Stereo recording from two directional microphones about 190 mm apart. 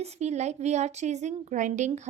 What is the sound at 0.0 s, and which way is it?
A woman's voice, 35° right (ahead or behind).